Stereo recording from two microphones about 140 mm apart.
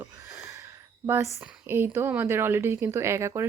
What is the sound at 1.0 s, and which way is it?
Speech, 20° right (ahead or behind).